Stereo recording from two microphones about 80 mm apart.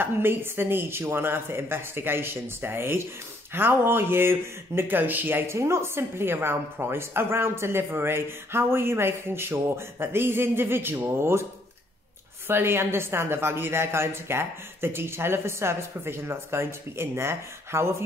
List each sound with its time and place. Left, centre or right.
0.0 s speech: right
12.4 s speech: right